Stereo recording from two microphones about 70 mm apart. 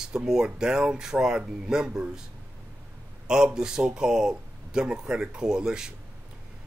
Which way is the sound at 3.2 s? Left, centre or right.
Centre.